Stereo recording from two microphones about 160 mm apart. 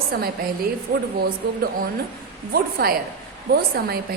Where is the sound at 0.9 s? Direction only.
60° right (ahead or behind).